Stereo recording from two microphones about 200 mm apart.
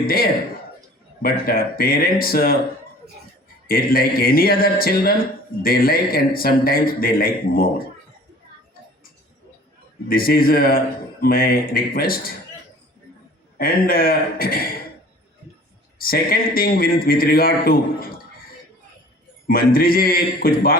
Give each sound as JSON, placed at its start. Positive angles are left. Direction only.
{"t": 1.2, "sound": "a man's voice", "side_deg": 50}
{"t": 3.7, "sound": "a man's voice", "side_deg": 45}
{"t": 10.1, "sound": "a man's voice", "side_deg": 45}
{"t": 13.6, "sound": "a man's voice", "side_deg": 45}
{"t": 16.0, "sound": "a man's voice", "side_deg": 50}
{"t": 19.5, "sound": "a man's voice", "side_deg": 45}